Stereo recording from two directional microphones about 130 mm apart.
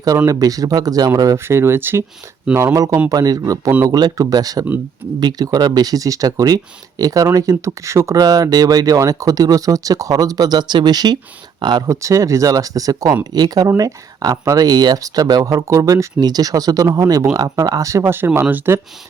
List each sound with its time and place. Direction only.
0.3 s speech: 30° right (ahead or behind)
2.7 s speech: 25° right (ahead or behind)